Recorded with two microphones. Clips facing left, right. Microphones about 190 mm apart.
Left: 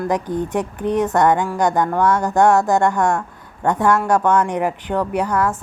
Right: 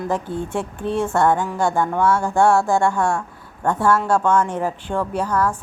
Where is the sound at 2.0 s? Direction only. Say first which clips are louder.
Even; 10° right (ahead or behind).